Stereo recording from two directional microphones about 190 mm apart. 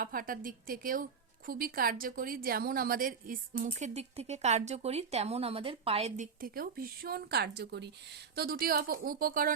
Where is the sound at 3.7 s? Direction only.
35° right (ahead or behind).